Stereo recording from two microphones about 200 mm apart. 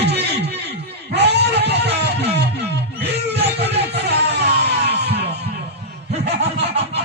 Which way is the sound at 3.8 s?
55° right (ahead or behind).